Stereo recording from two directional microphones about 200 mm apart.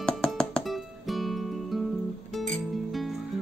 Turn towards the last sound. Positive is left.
turn(degrees=0)  # may be behind; listen again after turning